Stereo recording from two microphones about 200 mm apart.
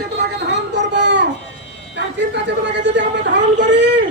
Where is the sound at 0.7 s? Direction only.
60° right (ahead or behind).